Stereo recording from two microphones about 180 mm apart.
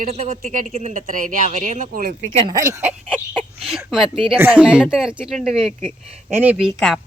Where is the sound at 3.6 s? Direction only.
5° right (ahead or behind).